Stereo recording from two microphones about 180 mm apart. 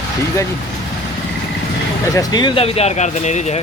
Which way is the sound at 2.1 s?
25° left (ahead or behind).